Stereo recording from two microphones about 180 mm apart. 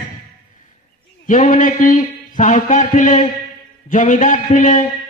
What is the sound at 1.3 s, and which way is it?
A man's voice, 45° left (ahead or behind).